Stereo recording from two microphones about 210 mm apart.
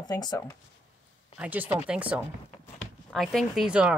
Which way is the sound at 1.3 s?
5° right (ahead or behind).